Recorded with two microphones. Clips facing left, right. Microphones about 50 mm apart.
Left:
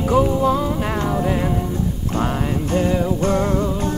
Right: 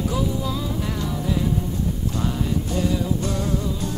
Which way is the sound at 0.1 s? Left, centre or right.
Left.